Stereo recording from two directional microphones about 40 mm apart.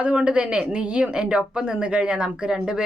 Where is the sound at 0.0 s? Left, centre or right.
Right.